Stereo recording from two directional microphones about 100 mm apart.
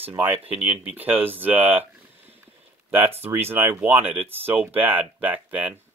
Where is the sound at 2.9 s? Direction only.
20° right (ahead or behind).